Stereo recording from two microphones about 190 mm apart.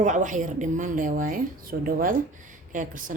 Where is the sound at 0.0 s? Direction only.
40° right (ahead or behind).